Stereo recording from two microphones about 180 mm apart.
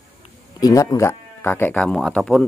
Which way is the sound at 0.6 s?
20° left (ahead or behind).